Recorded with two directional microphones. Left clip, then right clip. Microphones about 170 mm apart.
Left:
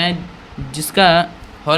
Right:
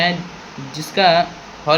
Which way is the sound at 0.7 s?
55° left (ahead or behind).